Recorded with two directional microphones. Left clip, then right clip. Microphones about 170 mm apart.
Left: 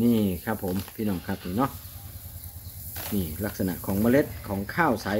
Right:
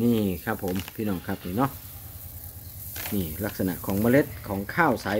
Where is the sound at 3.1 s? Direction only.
20° right (ahead or behind).